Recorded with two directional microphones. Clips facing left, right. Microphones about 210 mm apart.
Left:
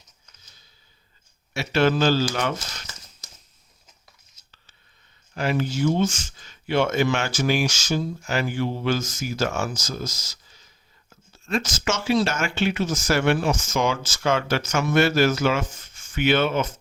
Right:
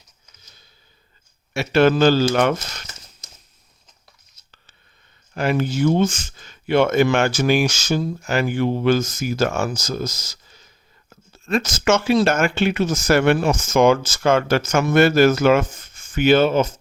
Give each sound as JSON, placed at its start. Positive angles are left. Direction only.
{"t": 1.5, "sound": "speech", "side_deg": -55}
{"t": 5.3, "sound": "speech", "side_deg": -55}